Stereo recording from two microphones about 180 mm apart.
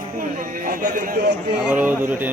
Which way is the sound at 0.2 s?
50° right (ahead or behind).